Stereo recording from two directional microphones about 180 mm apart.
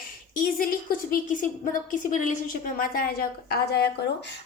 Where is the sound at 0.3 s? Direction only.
50° left (ahead or behind).